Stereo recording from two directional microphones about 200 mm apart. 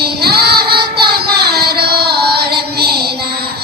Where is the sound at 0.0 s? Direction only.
50° right (ahead or behind).